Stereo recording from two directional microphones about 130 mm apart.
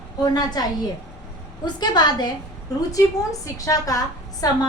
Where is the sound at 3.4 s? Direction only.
25° left (ahead or behind).